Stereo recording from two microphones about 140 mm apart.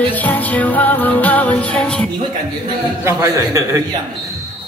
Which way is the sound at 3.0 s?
20° right (ahead or behind).